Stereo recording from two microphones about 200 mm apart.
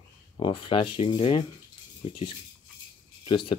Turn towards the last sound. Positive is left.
turn(degrees=25)  # may be behind; listen again after turning